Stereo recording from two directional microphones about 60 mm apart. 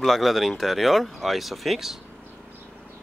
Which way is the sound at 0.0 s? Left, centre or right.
Centre.